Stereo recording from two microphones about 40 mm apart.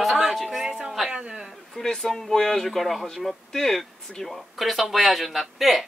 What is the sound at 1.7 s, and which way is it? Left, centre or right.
Speech, centre.